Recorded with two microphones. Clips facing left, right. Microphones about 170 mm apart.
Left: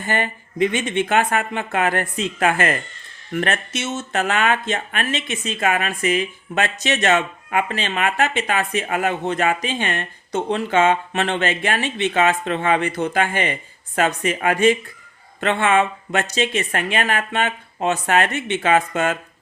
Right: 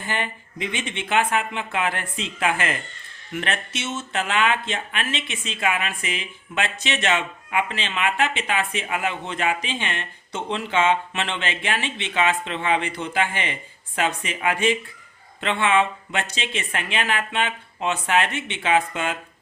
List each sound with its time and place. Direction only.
0.0 s speech: 45° left (ahead or behind)